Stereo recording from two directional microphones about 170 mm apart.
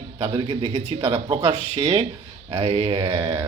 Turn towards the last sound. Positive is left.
turn(degrees=-30)  # may be behind; listen again after turning